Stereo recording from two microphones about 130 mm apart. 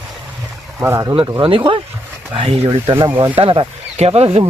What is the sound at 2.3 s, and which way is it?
Speech, 45° right (ahead or behind).